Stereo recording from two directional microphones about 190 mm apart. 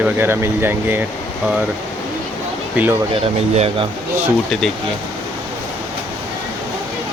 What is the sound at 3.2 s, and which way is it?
Speech, 30° right (ahead or behind).